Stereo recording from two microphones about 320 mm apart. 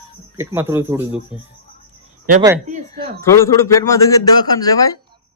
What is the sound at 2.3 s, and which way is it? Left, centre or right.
Speech, centre.